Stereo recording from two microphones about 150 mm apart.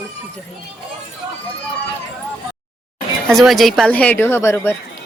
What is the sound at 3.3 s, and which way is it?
Speech, centre (ahead or behind).